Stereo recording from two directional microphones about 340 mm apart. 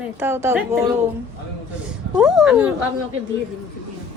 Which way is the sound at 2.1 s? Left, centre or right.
Centre.